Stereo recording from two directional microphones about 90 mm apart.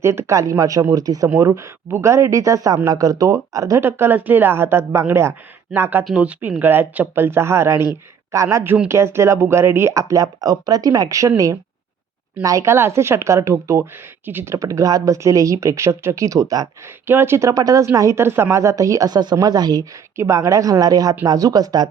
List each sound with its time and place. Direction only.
0.0 s speech: 30° right (ahead or behind)
3.8 s speech: 25° right (ahead or behind)
14.5 s speech: 35° right (ahead or behind)
16.8 s speech: 25° right (ahead or behind)
17.5 s speech: 40° right (ahead or behind)
20.1 s speech: 35° right (ahead or behind)